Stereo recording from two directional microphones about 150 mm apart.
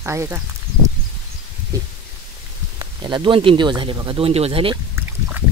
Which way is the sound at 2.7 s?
30° right (ahead or behind).